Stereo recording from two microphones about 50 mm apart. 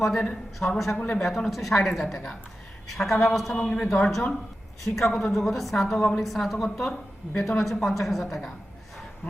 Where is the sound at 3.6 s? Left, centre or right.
Centre.